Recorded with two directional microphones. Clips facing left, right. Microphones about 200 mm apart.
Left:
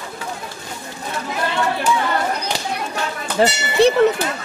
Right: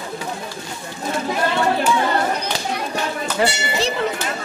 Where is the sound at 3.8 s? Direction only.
60° left (ahead or behind).